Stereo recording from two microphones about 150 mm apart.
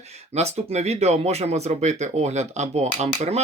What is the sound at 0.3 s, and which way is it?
Speech, 45° right (ahead or behind).